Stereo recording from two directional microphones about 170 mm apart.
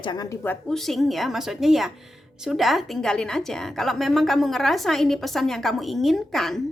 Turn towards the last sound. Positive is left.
turn(degrees=0)  # may be behind; listen again after turning